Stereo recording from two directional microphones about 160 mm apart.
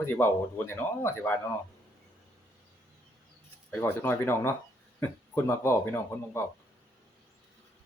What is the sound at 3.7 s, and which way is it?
Speech, 15° left (ahead or behind).